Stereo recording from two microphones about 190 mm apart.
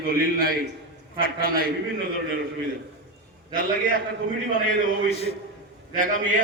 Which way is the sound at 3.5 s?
50° right (ahead or behind).